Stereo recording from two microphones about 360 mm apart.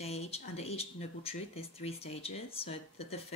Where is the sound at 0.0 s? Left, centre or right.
Centre.